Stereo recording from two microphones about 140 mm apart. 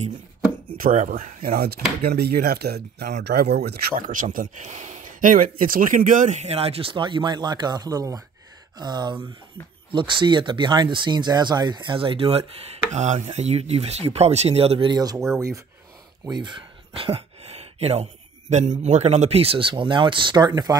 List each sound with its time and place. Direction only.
0.7 s speech: 75° right (ahead or behind)
6.5 s speech: 45° right (ahead or behind)
12.9 s speech: 55° right (ahead or behind); by 15.6 s 20° right (ahead or behind)
16.3 s a sound: 35° right (ahead or behind)
18.5 s speech: 55° right (ahead or behind); by 20.7 s 30° right (ahead or behind)